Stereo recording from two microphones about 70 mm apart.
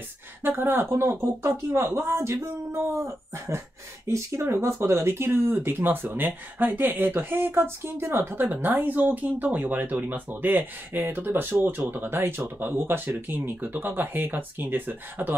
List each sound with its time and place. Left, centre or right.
0.4 s speech: right